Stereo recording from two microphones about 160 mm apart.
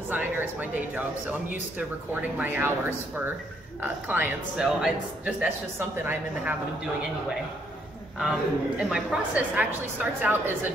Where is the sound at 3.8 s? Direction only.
10° right (ahead or behind).